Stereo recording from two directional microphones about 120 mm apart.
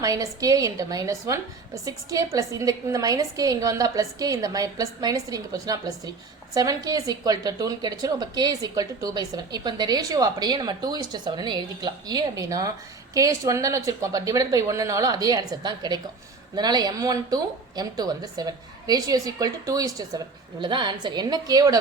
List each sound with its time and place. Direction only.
0.0 s a woman's voice: 30° right (ahead or behind)